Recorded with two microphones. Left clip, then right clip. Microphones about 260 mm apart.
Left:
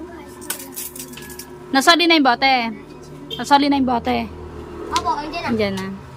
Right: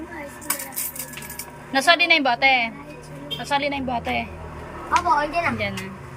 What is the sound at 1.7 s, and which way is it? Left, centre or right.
A woman's voice, centre.